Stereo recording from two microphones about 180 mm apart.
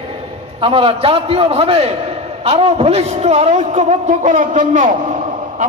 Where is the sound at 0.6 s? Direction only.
30° right (ahead or behind).